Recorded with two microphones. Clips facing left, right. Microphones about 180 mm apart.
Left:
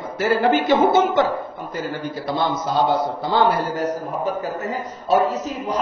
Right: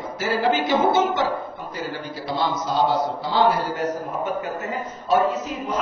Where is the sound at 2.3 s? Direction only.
55° left (ahead or behind).